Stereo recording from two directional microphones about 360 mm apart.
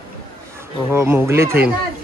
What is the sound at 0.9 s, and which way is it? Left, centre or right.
Speech, centre.